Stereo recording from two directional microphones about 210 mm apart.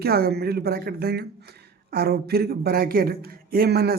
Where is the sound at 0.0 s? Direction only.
45° right (ahead or behind).